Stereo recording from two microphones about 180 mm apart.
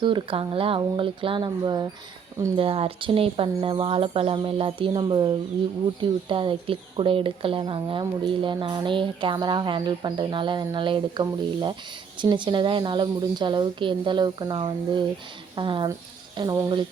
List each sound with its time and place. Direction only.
0.0 s speech: 30° right (ahead or behind)